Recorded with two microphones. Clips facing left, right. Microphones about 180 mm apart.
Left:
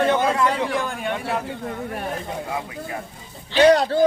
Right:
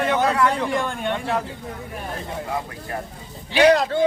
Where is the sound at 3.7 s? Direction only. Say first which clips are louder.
Left 1 dB; 35° left (ahead or behind).